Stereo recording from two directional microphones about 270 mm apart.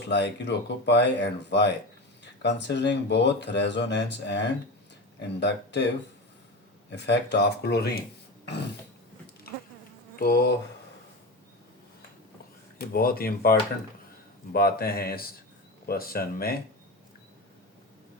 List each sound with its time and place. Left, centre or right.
0.1 s speech: left
6.9 s speech: left
10.2 s speech: left
12.8 s speech: left